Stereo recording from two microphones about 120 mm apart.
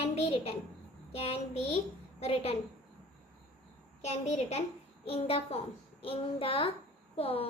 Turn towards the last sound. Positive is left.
turn(degrees=50)  # may be behind; listen again after turning